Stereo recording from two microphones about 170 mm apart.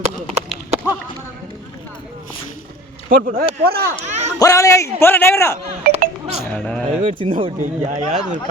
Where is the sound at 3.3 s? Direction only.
60° right (ahead or behind).